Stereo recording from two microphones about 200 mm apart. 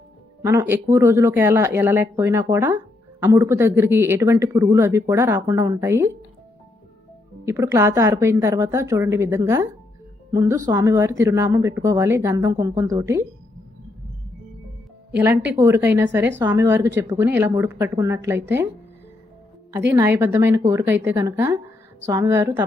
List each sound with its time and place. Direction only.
0.4 s speech: 15° right (ahead or behind)
7.4 s speech: 15° right (ahead or behind)
15.5 s speech: 15° right (ahead or behind)
19.9 s speech: 15° right (ahead or behind)